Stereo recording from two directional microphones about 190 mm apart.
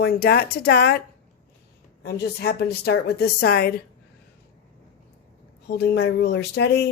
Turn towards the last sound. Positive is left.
turn(degrees=60)  # may be behind; listen again after turning